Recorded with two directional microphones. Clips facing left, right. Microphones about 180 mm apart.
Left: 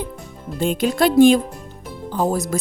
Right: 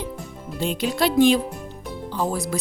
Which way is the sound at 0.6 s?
50° left (ahead or behind).